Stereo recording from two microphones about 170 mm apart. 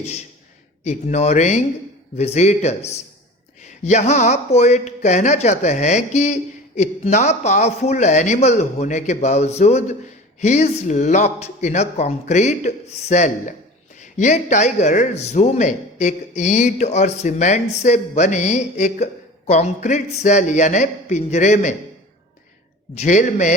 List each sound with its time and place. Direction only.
0.0 s speech: 40° left (ahead or behind)
23.0 s speech: 45° left (ahead or behind)